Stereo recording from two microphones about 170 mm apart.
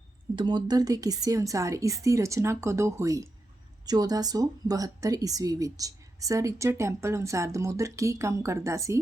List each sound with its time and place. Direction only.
0.3 s speech: 25° right (ahead or behind)